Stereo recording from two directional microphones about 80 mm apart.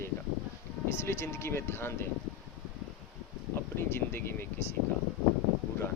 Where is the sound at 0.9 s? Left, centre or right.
Left.